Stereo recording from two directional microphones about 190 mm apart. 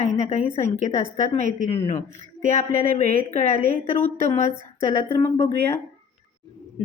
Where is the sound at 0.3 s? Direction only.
35° left (ahead or behind).